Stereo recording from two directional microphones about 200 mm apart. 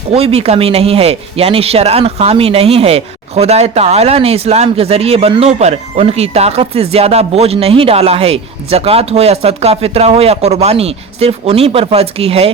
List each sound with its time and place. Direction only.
0.1 s speech: 30° right (ahead or behind)